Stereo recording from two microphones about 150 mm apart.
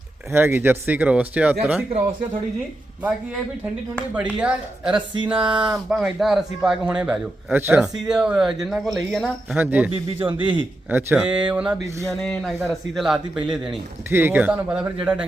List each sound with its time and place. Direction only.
0.3 s speech: 15° right (ahead or behind)
4.4 s speech: 5° right (ahead or behind)
4.9 s speech: 30° right (ahead or behind)
5.3 s speech: 10° right (ahead or behind)
9.6 s speech: 10° right (ahead or behind)
9.9 s speech: 35° right (ahead or behind)
10.8 s speech: 10° right (ahead or behind)
14.1 s speech: 15° right (ahead or behind)